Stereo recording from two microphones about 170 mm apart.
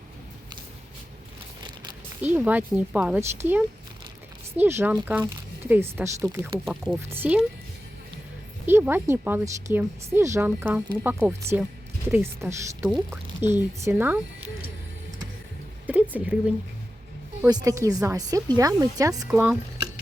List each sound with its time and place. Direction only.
2.2 s speech: 10° right (ahead or behind)
6.7 s speech: centre (ahead or behind)
7.1 s speech: 10° right (ahead or behind)
8.6 s speech: 10° right (ahead or behind)
15.9 s a sound: 10° right (ahead or behind)
17.4 s speech: 20° right (ahead or behind)